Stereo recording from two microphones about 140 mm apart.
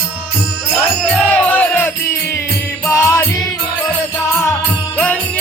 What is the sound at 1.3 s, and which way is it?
Music, 10° left (ahead or behind).